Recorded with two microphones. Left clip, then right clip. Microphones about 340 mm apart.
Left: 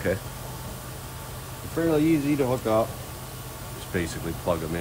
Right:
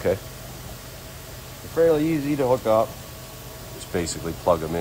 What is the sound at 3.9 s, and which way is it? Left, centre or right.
Speech, centre.